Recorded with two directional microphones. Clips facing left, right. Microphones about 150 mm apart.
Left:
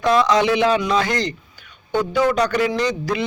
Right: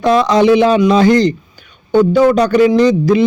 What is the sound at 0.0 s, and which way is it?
A man's voice, 30° right (ahead or behind).